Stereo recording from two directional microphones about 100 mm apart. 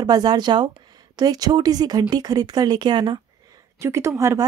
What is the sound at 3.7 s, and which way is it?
Speech, 30° right (ahead or behind).